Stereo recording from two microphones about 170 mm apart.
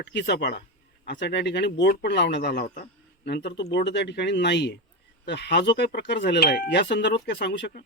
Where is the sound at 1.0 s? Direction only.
90° left.